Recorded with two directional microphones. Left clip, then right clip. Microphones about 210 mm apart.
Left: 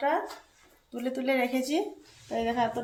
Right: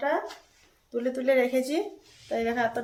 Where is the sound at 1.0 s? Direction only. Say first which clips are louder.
Right 4 dB; 20° right (ahead or behind).